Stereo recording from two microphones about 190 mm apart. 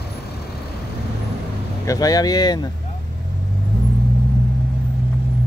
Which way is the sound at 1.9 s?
20° left (ahead or behind).